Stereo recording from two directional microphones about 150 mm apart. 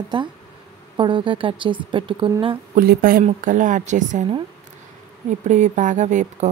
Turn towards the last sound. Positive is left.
turn(degrees=-55)  # may be behind; listen again after turning